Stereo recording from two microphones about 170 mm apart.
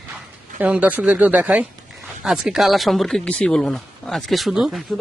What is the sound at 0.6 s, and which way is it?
Speech, 10° right (ahead or behind).